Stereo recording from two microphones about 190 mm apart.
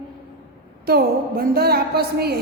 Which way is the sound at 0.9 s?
55° right (ahead or behind).